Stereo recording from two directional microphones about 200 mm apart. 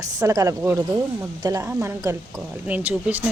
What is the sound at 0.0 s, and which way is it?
Speech, 15° right (ahead or behind).